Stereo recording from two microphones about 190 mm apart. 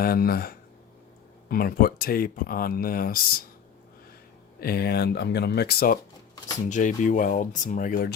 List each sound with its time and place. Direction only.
0.0 s speech: 50° left (ahead or behind)
4.6 s speech: 55° left (ahead or behind)
6.7 s speech: 40° left (ahead or behind)